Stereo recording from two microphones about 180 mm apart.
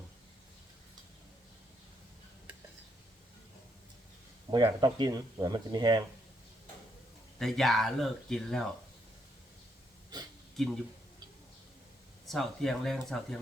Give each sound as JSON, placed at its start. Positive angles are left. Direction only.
{"t": 4.5, "sound": "speech", "side_deg": -20}
{"t": 7.3, "sound": "speech", "side_deg": 0}
{"t": 10.6, "sound": "speech", "side_deg": 0}
{"t": 12.3, "sound": "speech", "side_deg": 0}